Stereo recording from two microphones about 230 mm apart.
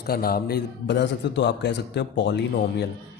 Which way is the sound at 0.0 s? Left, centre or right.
Left.